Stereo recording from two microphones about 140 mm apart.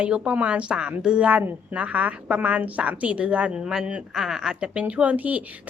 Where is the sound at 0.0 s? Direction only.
10° right (ahead or behind).